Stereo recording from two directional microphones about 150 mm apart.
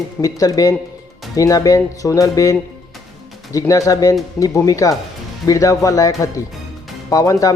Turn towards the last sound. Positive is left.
turn(degrees=20)  # may be behind; listen again after turning